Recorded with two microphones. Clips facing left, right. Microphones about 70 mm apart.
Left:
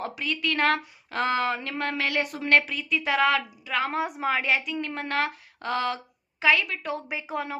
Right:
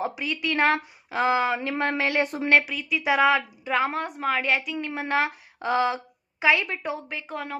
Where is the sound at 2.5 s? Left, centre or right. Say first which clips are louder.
Left 1 dB; centre.